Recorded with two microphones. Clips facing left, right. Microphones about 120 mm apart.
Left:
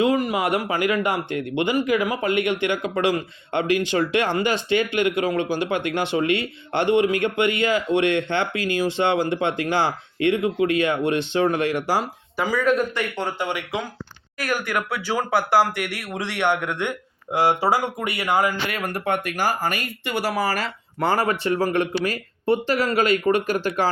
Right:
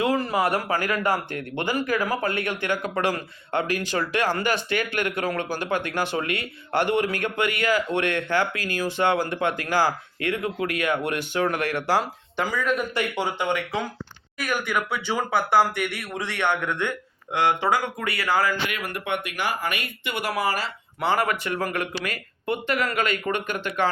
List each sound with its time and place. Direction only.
0.0 s speech: 20° left (ahead or behind)
17.3 s speech: 30° left (ahead or behind)
18.7 s speech: 40° left (ahead or behind)
21.2 s speech: 30° left (ahead or behind)